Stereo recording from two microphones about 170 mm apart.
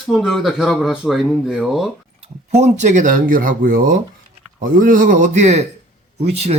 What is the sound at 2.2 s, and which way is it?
Speech, 40° right (ahead or behind).